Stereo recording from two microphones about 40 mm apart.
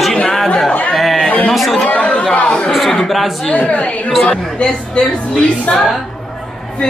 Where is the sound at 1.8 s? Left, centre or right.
Left.